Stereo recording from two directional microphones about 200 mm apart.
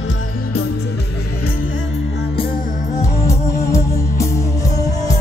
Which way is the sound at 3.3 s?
45° left (ahead or behind).